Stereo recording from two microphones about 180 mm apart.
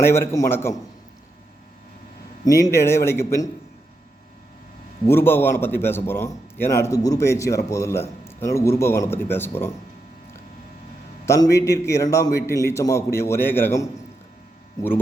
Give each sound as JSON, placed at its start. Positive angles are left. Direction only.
{"t": 0.0, "sound": "a man's voice", "side_deg": 15}
{"t": 2.4, "sound": "a man's voice", "side_deg": 20}
{"t": 5.0, "sound": "a man's voice", "side_deg": 10}
{"t": 11.5, "sound": "a man's voice", "side_deg": 15}